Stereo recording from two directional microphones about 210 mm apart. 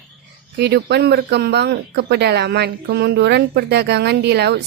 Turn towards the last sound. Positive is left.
turn(degrees=-50)  # may be behind; listen again after turning